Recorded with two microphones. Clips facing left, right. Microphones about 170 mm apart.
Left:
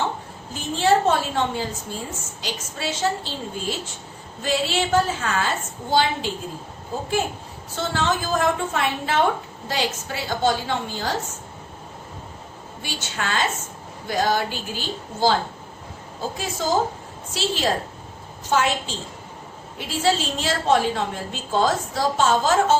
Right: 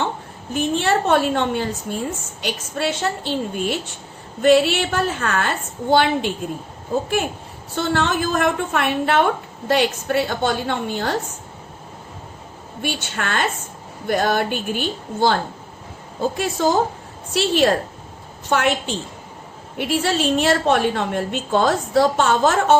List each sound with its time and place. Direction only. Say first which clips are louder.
0.5 s a woman's voice: right 1 dB; 65° right (ahead or behind)
7.8 s a woman's voice: right 4 dB; 60° right (ahead or behind)
12.8 s a woman's voice: right 4 dB; 60° right (ahead or behind)
16.4 s a woman's voice: right 3 dB; 65° right (ahead or behind)